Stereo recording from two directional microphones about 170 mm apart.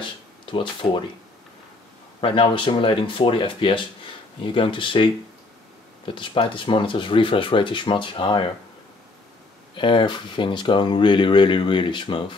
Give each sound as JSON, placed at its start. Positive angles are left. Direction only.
{"t": 0.5, "sound": "speech", "side_deg": 30}
{"t": 2.2, "sound": "speech", "side_deg": 30}
{"t": 9.8, "sound": "speech", "side_deg": 30}